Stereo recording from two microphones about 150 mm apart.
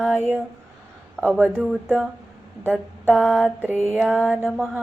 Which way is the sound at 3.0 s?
Centre (ahead or behind).